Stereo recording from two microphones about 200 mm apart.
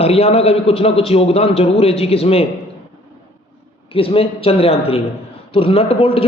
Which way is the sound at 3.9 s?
25° left (ahead or behind).